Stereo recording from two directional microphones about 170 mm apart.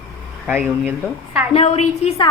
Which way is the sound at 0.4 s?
10° right (ahead or behind).